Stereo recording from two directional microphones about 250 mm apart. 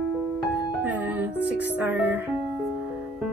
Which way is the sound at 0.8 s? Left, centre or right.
Centre.